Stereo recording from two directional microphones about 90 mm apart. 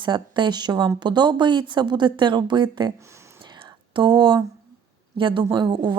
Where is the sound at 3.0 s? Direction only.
35° right (ahead or behind).